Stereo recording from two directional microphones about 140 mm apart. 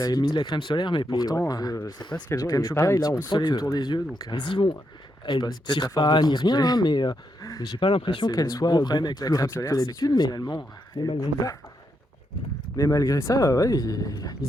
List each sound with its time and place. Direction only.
0.0 s speech: 30° left (ahead or behind)
12.7 s speech: 25° left (ahead or behind)